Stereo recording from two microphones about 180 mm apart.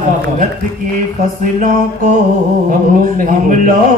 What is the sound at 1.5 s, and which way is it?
Speech, 45° right (ahead or behind).